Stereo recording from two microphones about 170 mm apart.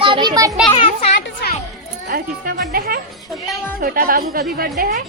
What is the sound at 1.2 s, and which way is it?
Music, 80° left.